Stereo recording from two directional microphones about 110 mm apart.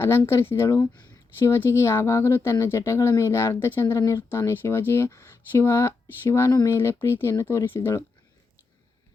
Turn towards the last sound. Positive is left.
turn(degrees=20)  # may be behind; listen again after turning